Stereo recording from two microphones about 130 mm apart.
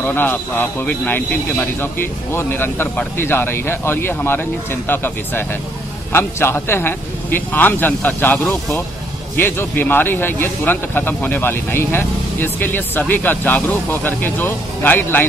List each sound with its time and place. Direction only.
0.0 s speech: 15° left (ahead or behind)